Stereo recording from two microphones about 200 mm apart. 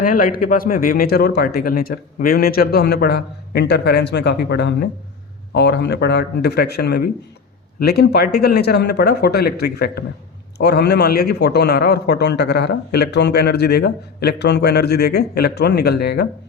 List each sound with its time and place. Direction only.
0.0 s speech: 45° left (ahead or behind)